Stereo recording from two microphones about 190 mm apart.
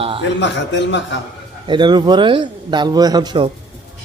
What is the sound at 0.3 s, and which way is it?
Speech, 70° left (ahead or behind).